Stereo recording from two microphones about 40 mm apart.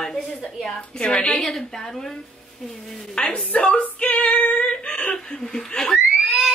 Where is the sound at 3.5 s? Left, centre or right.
Left.